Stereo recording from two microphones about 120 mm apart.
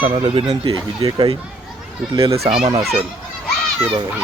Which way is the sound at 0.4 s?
35° right (ahead or behind).